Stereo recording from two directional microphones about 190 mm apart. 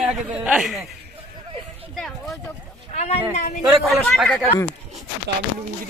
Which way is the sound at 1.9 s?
Centre (ahead or behind).